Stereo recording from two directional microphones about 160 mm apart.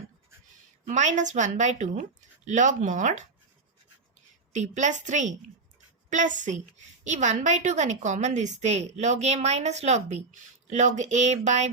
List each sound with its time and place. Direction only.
0.9 s a woman's voice: 50° right (ahead or behind)
4.5 s a woman's voice: 50° right (ahead or behind)